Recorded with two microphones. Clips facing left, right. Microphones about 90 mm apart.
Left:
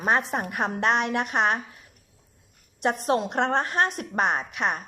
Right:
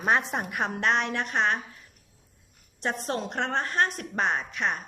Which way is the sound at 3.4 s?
30° left (ahead or behind).